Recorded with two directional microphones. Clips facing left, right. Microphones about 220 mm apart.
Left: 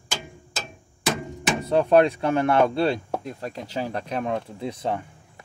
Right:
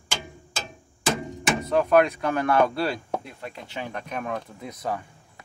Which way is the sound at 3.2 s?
40° left (ahead or behind).